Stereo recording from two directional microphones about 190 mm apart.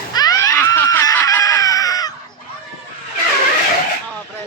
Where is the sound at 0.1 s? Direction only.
20° left (ahead or behind).